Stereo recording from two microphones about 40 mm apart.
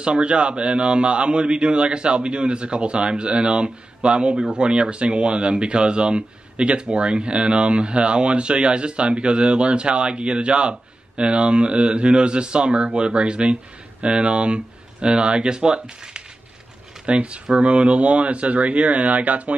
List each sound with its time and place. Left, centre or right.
0.0 s speech: right